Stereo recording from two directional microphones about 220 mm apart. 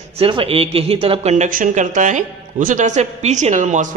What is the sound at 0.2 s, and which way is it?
Speech, 25° right (ahead or behind).